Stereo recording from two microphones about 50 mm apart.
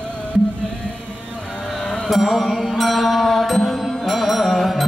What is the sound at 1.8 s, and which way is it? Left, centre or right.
Music, left.